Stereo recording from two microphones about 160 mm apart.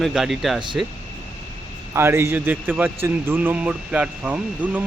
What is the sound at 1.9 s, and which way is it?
Speech, 15° right (ahead or behind).